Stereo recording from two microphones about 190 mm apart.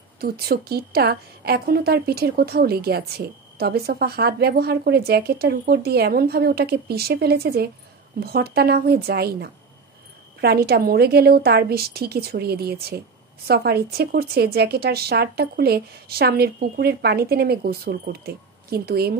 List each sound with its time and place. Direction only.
0.2 s a woman's voice: 55° right (ahead or behind)